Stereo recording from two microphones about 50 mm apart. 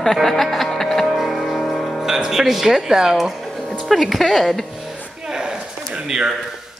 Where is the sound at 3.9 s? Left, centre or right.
Centre.